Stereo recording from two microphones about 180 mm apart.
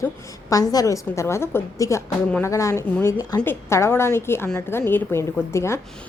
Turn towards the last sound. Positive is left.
turn(degrees=15)  # may be behind; listen again after turning